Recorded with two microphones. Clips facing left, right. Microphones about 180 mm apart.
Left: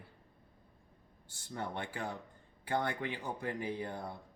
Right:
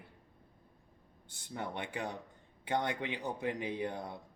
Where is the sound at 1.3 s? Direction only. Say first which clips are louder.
Even; 20° right (ahead or behind).